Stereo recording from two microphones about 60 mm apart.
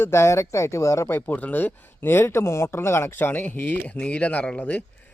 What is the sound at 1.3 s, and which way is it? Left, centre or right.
Speech, left.